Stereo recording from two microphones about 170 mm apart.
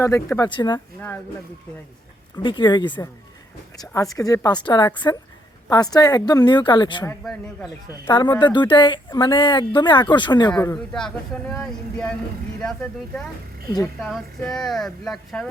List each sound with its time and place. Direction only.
0.0 s a woman's voice: 15° left (ahead or behind)
0.9 s speech: 10° left (ahead or behind)
2.4 s a woman's voice: 30° left (ahead or behind)
7.1 s speech: 5° left (ahead or behind)
8.1 s a woman's voice: 25° left (ahead or behind)
10.8 s speech: 5° left (ahead or behind)
13.8 s speech: 5° left (ahead or behind)